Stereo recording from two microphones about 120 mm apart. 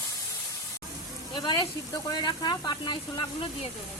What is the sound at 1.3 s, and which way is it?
Speech, 35° left (ahead or behind).